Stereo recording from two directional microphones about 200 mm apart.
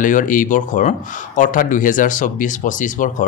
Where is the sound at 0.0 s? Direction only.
40° left (ahead or behind).